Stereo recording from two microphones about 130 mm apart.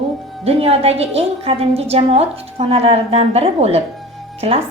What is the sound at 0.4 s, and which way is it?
A woman's voice, 50° right (ahead or behind).